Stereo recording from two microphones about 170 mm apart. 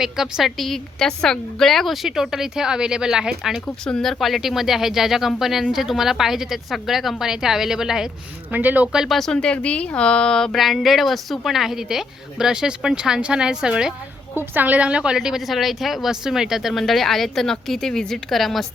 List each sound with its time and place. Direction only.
0.0 s speech: centre (ahead or behind)